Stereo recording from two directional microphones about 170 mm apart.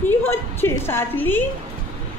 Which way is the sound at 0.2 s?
15° left (ahead or behind).